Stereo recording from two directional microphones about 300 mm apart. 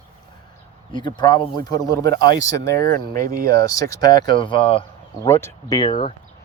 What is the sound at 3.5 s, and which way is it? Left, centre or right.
Speech, centre.